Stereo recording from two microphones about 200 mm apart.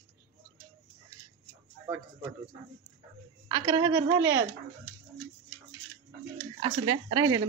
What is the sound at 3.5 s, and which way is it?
A man's voice, 20° right (ahead or behind).